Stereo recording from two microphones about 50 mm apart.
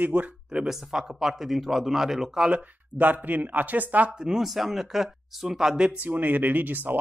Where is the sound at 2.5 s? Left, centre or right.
Right.